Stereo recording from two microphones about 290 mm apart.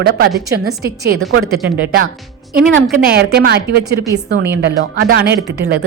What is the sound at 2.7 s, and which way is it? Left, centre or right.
A woman's voice, right.